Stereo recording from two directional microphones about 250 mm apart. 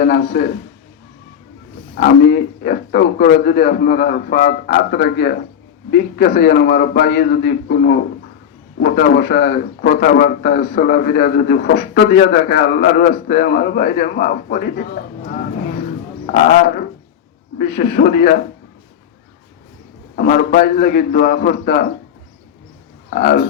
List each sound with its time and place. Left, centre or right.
0.0 s a man's voice: left
2.0 s a man's voice: left
20.1 s a man's voice: left
23.0 s speech: left